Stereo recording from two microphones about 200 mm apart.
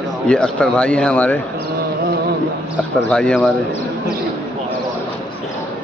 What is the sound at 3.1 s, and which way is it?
Speech, 5° left (ahead or behind).